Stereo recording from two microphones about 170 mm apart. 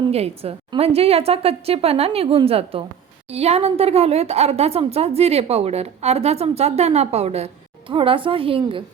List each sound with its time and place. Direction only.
0.0 s a woman's voice: 35° right (ahead or behind)